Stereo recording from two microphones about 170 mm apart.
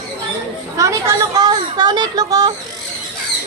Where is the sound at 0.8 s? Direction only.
20° right (ahead or behind).